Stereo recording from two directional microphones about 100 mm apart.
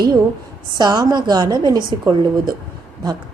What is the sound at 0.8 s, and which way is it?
A woman's voice, 40° right (ahead or behind).